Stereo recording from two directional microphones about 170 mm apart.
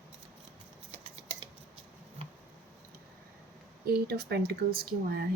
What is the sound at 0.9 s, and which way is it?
Scissors, 35° right (ahead or behind).